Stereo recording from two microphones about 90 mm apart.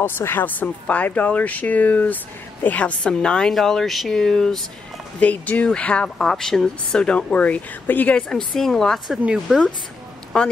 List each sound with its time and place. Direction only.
0.0 s a woman's voice: 25° left (ahead or behind); by 4.6 s 5° left (ahead or behind)
5.2 s speech: 15° left (ahead or behind)
8.2 s a woman's voice: 10° left (ahead or behind)
10.3 s speech: 10° left (ahead or behind)